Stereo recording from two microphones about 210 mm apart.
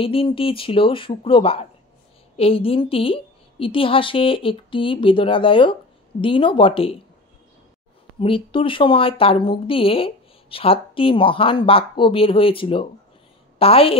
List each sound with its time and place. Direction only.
0.0 s a woman's voice: 25° left (ahead or behind)
8.2 s a woman's voice: 25° left (ahead or behind)